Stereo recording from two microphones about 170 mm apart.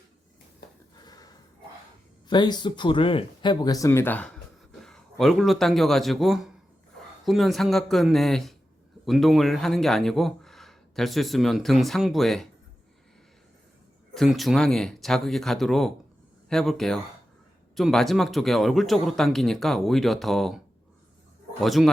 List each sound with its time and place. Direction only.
1.0 s a sound: 25° left (ahead or behind)
2.2 s speech: 25° left (ahead or behind); by 12.5 s centre (ahead or behind)
14.1 s speech: centre (ahead or behind)
21.6 s speech: centre (ahead or behind)